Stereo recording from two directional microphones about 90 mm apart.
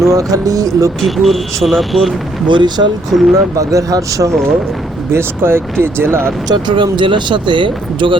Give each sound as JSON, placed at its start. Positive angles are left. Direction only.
{"t": 0.1, "sound": "speech", "side_deg": -40}
{"t": 1.0, "sound": "speech", "side_deg": 0}
{"t": 2.5, "sound": "speech", "side_deg": -60}
{"t": 3.1, "sound": "speech", "side_deg": 0}
{"t": 3.3, "sound": "speech", "side_deg": -35}
{"t": 5.1, "sound": "speech", "side_deg": -25}
{"t": 6.5, "sound": "speech", "side_deg": -55}